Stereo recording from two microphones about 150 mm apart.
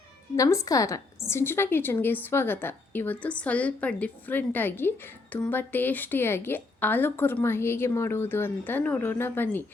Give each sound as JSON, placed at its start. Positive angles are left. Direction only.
{"t": 0.3, "sound": "a woman's voice", "side_deg": 20}